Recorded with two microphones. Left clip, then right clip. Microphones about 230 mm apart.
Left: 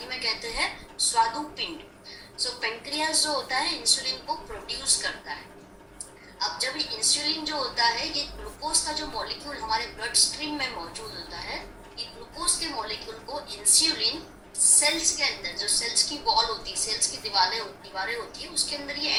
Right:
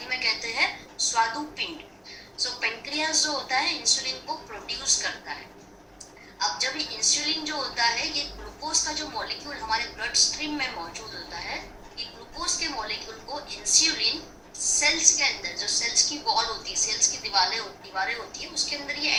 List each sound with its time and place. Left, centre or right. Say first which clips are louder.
0.1 s a sound: right 3 dB; centre
2.6 s a woman's voice: right 1 dB; centre
6.4 s a woman's voice: right 2 dB; centre